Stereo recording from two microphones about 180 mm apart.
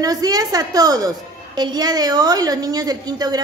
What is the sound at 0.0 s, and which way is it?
A woman's voice, 20° right (ahead or behind).